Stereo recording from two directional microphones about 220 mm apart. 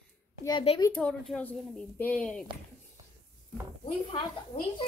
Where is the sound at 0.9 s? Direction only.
5° left (ahead or behind).